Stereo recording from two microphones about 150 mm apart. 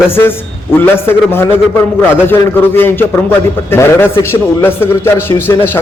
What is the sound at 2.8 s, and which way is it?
A man's voice, 15° left (ahead or behind).